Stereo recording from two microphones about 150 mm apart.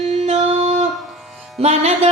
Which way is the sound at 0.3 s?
45° right (ahead or behind).